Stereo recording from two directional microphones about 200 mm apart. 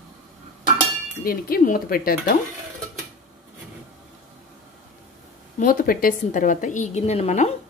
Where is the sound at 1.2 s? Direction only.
50° left (ahead or behind).